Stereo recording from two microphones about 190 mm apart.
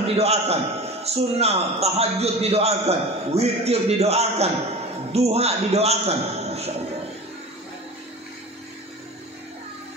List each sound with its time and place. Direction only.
0.0 s a man's voice: 35° right (ahead or behind)